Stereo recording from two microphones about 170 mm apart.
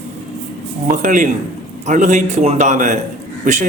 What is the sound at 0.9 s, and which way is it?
A man's voice, 50° right (ahead or behind).